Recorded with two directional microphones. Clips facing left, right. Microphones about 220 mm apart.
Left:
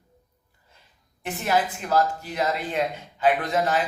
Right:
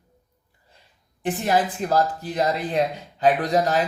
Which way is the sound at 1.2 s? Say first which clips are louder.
Right 3 dB; 35° right (ahead or behind).